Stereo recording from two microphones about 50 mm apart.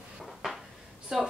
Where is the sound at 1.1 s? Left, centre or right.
Centre.